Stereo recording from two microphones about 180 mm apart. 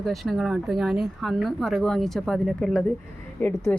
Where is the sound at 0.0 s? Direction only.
Centre (ahead or behind).